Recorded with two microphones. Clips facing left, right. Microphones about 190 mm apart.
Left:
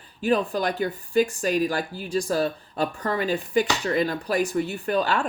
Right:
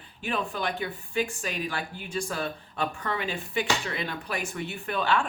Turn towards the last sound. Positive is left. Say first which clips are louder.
# left 3 dB
turn(degrees=40)  # may be behind; listen again after turning